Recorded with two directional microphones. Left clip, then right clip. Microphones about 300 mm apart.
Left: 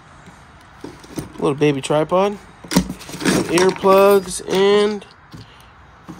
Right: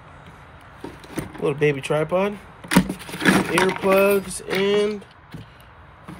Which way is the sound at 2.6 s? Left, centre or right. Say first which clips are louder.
Even; centre.